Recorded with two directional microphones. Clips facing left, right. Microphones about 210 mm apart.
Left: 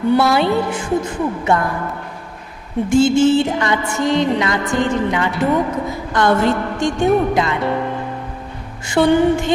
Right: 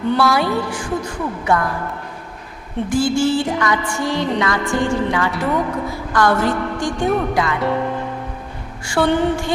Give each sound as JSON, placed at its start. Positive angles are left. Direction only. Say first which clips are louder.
{"t": 0.2, "sound": "music", "louder": "left 2 dB", "side_deg": 25}
{"t": 2.9, "sound": "music", "louder": "left 5 dB", "side_deg": 20}
{"t": 9.0, "sound": "music", "louder": "left 5 dB", "side_deg": 20}